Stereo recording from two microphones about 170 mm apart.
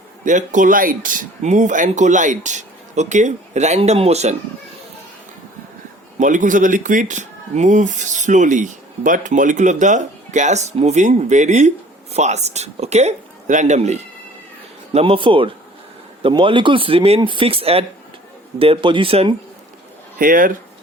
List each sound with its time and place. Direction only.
0.3 s speech: 50° right (ahead or behind)
6.1 s speech: 50° right (ahead or behind)
20.1 s speech: 55° right (ahead or behind)